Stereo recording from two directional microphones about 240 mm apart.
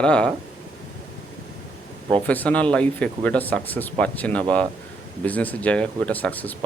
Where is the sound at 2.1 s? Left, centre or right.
Centre.